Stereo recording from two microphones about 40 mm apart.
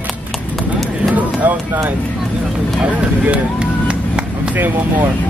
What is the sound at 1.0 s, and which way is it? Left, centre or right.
Run, right.